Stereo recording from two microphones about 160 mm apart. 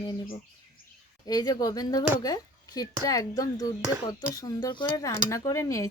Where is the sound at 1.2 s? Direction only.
25° left (ahead or behind).